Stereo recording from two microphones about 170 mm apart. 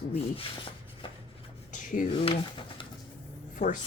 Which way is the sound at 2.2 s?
30° left (ahead or behind).